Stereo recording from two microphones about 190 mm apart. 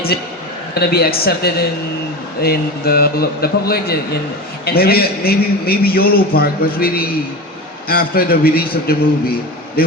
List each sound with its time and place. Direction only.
0.7 s a man's voice: 55° left (ahead or behind)